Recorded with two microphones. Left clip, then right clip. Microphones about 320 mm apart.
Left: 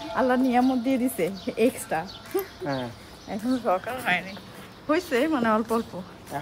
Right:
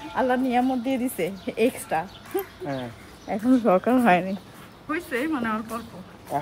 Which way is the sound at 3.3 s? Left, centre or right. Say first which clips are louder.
Right 5 dB; centre.